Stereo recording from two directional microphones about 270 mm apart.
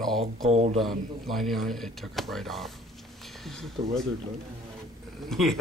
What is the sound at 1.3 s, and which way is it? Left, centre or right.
Speech, centre.